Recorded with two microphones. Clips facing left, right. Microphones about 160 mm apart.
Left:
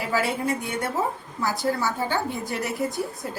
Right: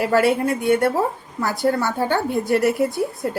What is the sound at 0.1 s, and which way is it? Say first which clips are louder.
A woman's voice: right 5 dB; 60° right (ahead or behind).